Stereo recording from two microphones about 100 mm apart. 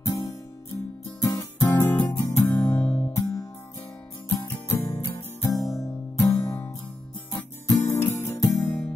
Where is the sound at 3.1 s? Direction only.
35° left (ahead or behind).